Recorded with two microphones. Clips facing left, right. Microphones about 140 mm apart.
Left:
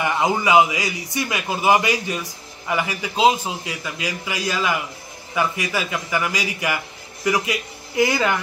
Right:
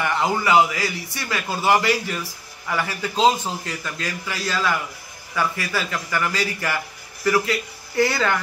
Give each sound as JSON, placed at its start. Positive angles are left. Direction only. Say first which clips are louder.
{"t": 0.0, "sound": "a man's voice", "louder": "left 1 dB", "side_deg": 15}